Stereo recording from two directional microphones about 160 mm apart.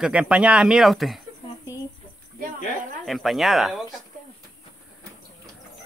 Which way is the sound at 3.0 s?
Centre (ahead or behind).